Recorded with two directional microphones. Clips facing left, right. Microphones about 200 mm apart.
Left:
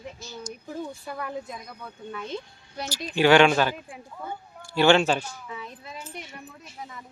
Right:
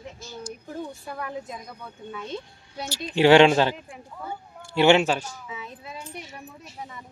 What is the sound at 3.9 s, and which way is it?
Speech, 5° right (ahead or behind).